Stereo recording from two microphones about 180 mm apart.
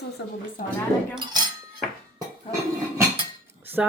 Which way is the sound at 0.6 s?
50° left (ahead or behind).